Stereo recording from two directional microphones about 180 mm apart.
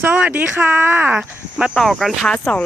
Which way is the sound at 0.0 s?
10° right (ahead or behind).